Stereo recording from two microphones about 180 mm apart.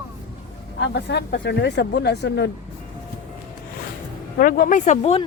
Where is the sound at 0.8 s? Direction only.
70° left (ahead or behind).